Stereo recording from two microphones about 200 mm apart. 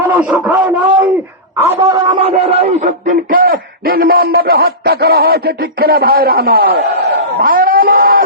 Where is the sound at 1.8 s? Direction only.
20° right (ahead or behind).